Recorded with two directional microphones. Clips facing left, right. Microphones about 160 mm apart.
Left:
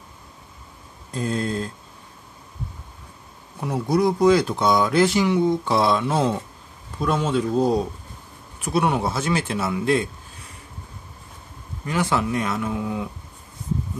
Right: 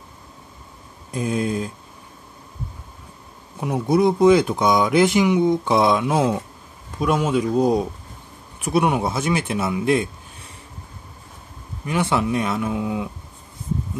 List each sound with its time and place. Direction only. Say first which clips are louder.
1.1 s speech: right 2 dB; 15° right (ahead or behind)
3.6 s speech: right 3 dB; 20° right (ahead or behind)
11.8 s speech: right 2 dB; 20° right (ahead or behind)